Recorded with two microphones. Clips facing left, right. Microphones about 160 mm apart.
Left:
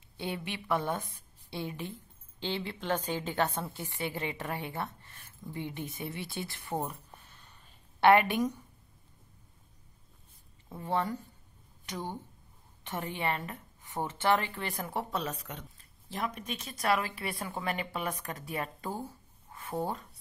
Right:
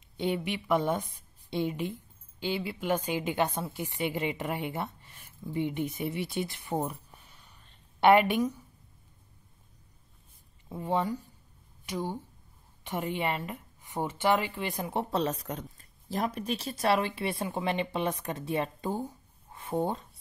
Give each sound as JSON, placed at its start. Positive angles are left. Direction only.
{"t": 0.2, "sound": "a woman's voice", "side_deg": -15}
{"t": 8.4, "sound": "a woman's voice", "side_deg": 0}
{"t": 10.7, "sound": "a woman's voice", "side_deg": -15}